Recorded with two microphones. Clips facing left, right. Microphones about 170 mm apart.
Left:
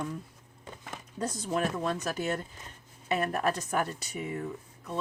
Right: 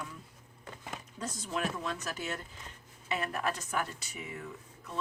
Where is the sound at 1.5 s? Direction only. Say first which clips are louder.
Left 5 dB; 45° left (ahead or behind).